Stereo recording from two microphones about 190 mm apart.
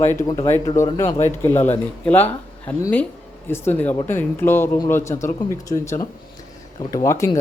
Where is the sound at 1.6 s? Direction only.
10° left (ahead or behind).